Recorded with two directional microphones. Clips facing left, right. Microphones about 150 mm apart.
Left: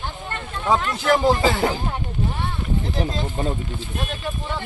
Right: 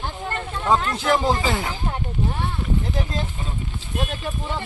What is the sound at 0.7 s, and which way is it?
Speech, 5° left (ahead or behind).